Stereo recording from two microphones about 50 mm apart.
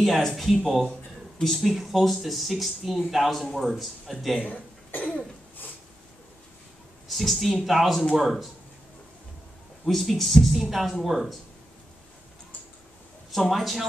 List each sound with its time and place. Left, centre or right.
0.0 s speech: centre
1.4 s speech: centre
4.4 s cough: left
7.1 s speech: centre
9.8 s speech: centre
13.3 s speech: centre